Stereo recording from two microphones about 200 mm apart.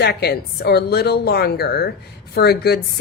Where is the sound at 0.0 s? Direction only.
55° left (ahead or behind).